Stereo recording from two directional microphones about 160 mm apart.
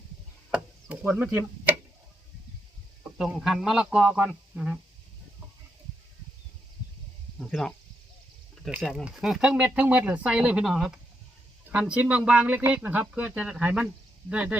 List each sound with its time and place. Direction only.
0.5 s a sound: 10° right (ahead or behind)
3.2 s speech: 5° right (ahead or behind)
7.3 s speech: 5° left (ahead or behind)